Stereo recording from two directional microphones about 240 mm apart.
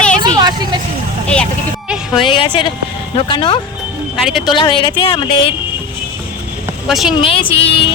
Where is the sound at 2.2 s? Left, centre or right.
Left.